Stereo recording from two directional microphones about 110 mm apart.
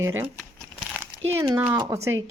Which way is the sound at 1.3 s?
25° right (ahead or behind).